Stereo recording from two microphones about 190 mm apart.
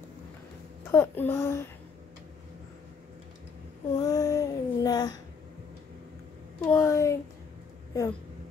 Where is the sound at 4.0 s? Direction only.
20° left (ahead or behind).